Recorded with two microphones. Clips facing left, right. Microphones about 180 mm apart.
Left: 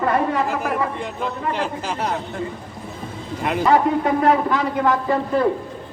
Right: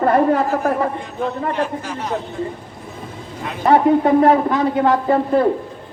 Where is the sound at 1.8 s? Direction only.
75° left (ahead or behind).